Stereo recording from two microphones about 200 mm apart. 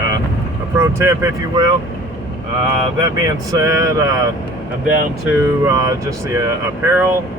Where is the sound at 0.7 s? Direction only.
15° right (ahead or behind).